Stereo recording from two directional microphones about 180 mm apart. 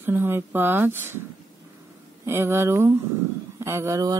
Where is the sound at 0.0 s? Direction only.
10° right (ahead or behind).